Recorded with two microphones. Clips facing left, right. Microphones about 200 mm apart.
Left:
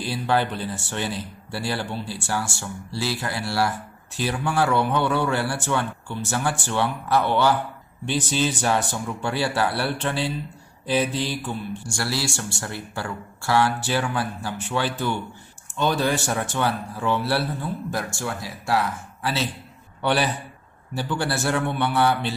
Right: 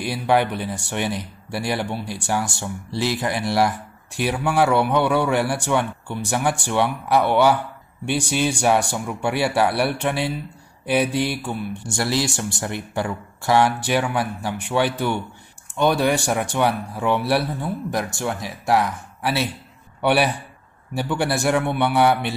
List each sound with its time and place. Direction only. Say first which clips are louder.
0.0 s a man's voice: right 3 dB; 15° right (ahead or behind)